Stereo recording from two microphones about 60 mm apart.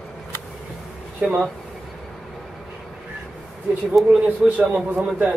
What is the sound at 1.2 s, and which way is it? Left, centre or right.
Speech, right.